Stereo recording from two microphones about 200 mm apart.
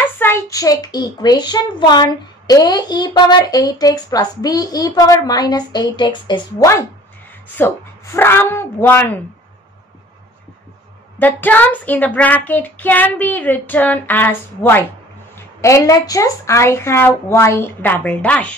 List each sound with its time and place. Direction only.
0.0 s a child's voice: 10° left (ahead or behind)
7.5 s child singing: 15° left (ahead or behind)
11.1 s child singing: 10° left (ahead or behind)